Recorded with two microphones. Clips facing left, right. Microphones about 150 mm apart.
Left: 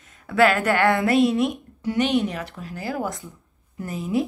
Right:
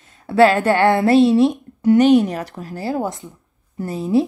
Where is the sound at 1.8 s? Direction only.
40° right (ahead or behind).